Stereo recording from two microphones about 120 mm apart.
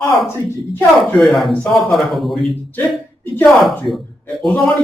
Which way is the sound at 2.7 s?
15° left (ahead or behind).